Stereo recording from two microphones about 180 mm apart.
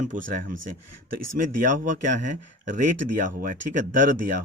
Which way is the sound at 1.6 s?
45° right (ahead or behind).